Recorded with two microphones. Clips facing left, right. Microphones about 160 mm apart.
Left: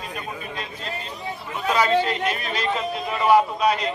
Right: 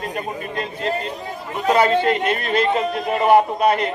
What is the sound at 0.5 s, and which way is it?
Speech, 55° right (ahead or behind).